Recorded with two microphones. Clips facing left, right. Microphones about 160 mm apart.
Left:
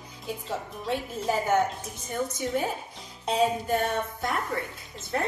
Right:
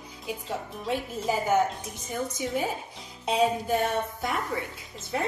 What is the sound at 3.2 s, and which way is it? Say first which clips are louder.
A woman's voice: even; 5° right (ahead or behind).